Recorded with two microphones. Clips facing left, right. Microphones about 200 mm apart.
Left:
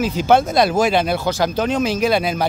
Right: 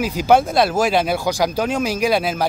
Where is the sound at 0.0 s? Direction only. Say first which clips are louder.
Even; 10° right (ahead or behind).